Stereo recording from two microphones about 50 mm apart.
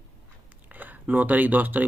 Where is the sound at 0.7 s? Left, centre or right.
Right.